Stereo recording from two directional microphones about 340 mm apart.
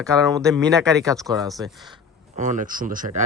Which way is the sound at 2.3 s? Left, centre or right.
Right.